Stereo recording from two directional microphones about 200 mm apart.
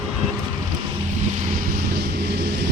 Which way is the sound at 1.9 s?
55° right (ahead or behind).